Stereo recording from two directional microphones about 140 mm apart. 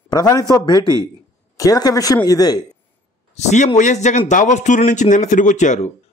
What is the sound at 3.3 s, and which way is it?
A man's voice, 55° left (ahead or behind).